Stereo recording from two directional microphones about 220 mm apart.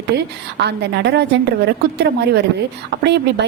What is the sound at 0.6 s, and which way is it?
A woman's voice, 50° right (ahead or behind).